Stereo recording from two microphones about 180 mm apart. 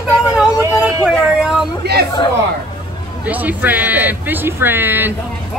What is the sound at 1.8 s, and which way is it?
Speech, 65° right (ahead or behind).